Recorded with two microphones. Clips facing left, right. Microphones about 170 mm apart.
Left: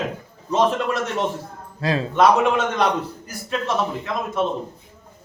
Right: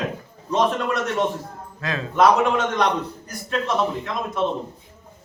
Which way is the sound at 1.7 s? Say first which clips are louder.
Left 6 dB; 35° left (ahead or behind).